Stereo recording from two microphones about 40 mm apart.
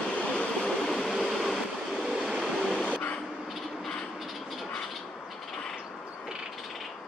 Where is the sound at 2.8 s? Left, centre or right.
Left.